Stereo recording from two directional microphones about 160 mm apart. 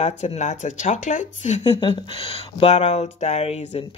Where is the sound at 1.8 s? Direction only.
30° left (ahead or behind).